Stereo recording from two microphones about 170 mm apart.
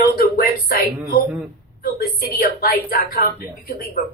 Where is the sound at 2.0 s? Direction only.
65° left (ahead or behind).